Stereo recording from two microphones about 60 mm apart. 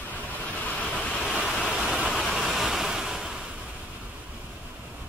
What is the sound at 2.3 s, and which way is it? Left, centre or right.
Waves, centre.